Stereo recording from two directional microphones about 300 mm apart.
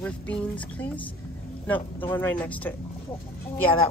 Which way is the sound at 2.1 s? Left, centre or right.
Centre.